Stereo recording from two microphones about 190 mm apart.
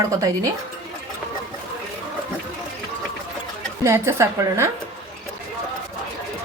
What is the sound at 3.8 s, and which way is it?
Speech, 15° right (ahead or behind).